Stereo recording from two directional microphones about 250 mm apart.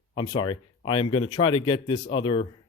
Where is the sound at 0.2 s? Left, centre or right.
Centre.